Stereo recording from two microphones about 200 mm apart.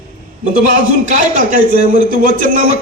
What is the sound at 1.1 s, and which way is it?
Speech, 40° right (ahead or behind).